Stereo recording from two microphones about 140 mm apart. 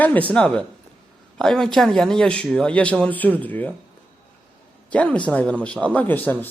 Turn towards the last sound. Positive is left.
turn(degrees=15)  # may be behind; listen again after turning